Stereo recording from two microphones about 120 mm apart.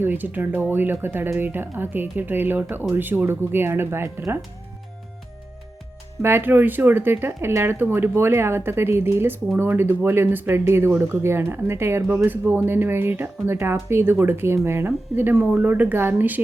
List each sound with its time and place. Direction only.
0.0 s speech: 15° right (ahead or behind)
6.2 s speech: 20° right (ahead or behind)